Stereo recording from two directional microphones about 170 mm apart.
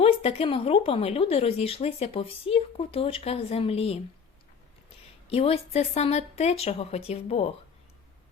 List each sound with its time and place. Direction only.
0.0 s speech: 35° left (ahead or behind)
5.3 s speech: 35° left (ahead or behind)